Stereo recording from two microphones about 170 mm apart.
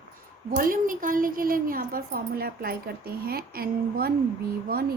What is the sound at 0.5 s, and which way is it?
A woman's voice, 55° right (ahead or behind).